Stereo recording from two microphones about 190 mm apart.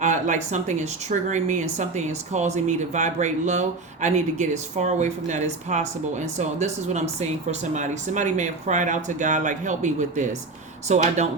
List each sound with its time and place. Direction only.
0.0 s a woman's voice: 40° right (ahead or behind)